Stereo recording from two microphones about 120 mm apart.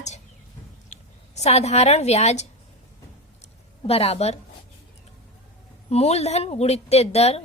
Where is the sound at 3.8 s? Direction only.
55° left (ahead or behind).